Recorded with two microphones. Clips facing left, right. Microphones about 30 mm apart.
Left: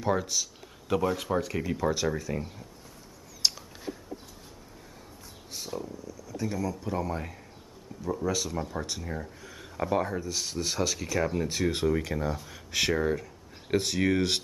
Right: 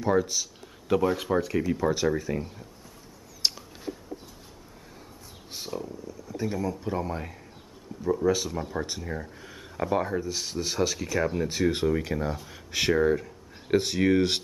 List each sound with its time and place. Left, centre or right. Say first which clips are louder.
0.0 s speech: right 3 dB; centre
3.4 s a sound: even; centre
5.7 s speech: right 2 dB; centre
6.0 s speech: right 4 dB; right; by 14.4 s centre